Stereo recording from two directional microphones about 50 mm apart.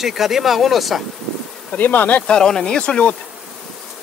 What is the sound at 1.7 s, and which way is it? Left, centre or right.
Bee, left.